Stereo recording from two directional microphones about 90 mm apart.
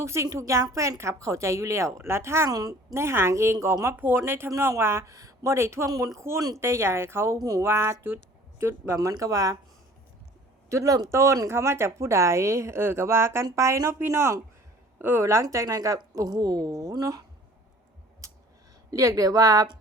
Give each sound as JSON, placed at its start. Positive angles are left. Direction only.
{"t": 0.0, "sound": "speech", "side_deg": -30}
{"t": 2.5, "sound": "a woman's voice", "side_deg": -45}
{"t": 2.9, "sound": "speech", "side_deg": -30}
{"t": 10.7, "sound": "a woman's voice", "side_deg": -40}
{"t": 18.2, "sound": "a sound", "side_deg": -35}
{"t": 18.9, "sound": "speech", "side_deg": -40}